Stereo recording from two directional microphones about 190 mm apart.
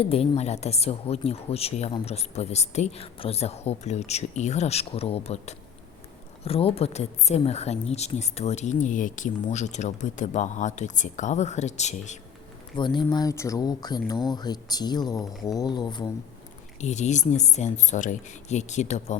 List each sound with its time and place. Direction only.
0.0 s a woman's voice: 30° left (ahead or behind)
12.7 s speech: 25° left (ahead or behind)
16.8 s a woman's voice: 40° left (ahead or behind)